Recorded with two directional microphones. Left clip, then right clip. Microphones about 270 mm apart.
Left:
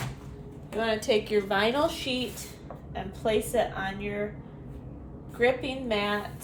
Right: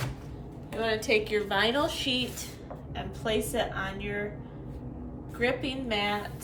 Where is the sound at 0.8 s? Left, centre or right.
Left.